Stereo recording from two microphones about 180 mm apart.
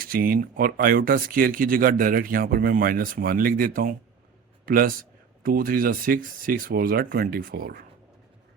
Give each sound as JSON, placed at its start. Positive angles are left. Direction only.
{"t": 0.0, "sound": "speech", "side_deg": -50}